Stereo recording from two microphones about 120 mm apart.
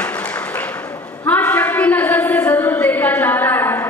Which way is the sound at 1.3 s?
15° left (ahead or behind).